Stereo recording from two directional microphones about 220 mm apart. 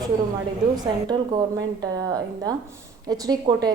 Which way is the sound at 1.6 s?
15° right (ahead or behind).